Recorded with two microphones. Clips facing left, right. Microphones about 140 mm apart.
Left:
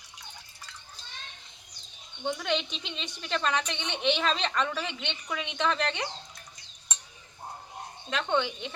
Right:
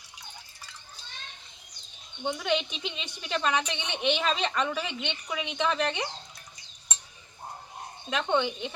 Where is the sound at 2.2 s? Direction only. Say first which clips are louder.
Right 1 dB; 5° right (ahead or behind).